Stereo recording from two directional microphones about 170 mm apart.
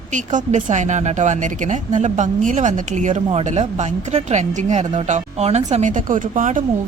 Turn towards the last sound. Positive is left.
turn(degrees=-50)  # may be behind; listen again after turning